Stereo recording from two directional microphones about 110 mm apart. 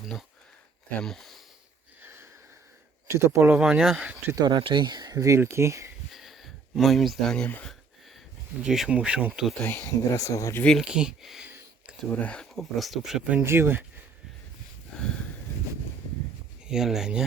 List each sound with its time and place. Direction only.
0.0 s speech: 5° right (ahead or behind)
3.1 s speech: 25° right (ahead or behind)
4.4 s speech: 45° right (ahead or behind); by 5.9 s 25° right (ahead or behind)
6.1 s a sound: centre (ahead or behind)
8.6 s speech: 5° right (ahead or behind)
10.1 s speech: 30° left (ahead or behind)
10.8 s speech: 5° right (ahead or behind)
11.4 s a sound: 15° right (ahead or behind)
12.1 s speech: 10° left (ahead or behind); by 13.4 s 5° right (ahead or behind)
13.4 s speech: 20° right (ahead or behind)
14.9 s a sound: 5° left (ahead or behind)
16.6 s speech: 5° right (ahead or behind)